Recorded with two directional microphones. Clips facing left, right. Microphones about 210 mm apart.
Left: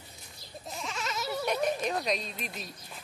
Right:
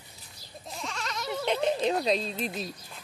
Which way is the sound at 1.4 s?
25° right (ahead or behind).